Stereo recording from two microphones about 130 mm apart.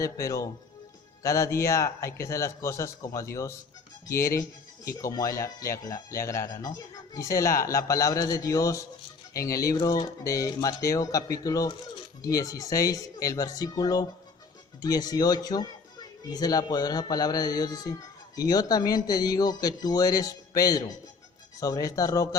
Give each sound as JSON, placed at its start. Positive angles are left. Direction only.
{"t": 0.0, "sound": "speech", "side_deg": 25}